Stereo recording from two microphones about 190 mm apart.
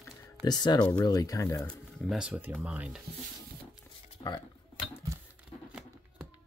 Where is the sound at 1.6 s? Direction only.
5° left (ahead or behind).